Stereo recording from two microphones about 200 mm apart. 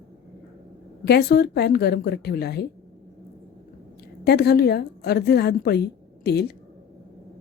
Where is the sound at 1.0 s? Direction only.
55° left (ahead or behind).